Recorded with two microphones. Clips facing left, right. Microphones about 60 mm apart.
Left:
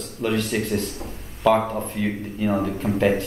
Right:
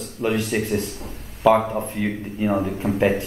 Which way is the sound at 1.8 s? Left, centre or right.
Centre.